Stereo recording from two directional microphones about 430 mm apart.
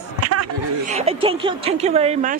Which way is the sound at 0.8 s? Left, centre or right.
Centre.